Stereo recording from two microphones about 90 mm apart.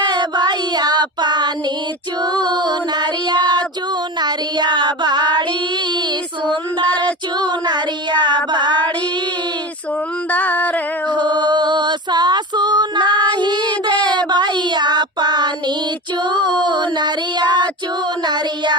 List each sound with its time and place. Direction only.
0.1 s child singing: 50° right (ahead or behind)
6.8 s female singing: 15° left (ahead or behind)
7.3 s child singing: 55° right (ahead or behind)
10.3 s music: 15° left (ahead or behind)
11.1 s music: 55° right (ahead or behind)
13.1 s child singing: 15° left (ahead or behind)
13.3 s child singing: 55° right (ahead or behind)